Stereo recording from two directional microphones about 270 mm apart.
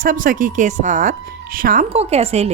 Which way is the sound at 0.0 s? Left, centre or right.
Right.